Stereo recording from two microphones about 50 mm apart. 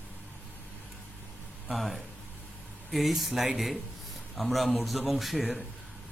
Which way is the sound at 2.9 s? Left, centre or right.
Centre.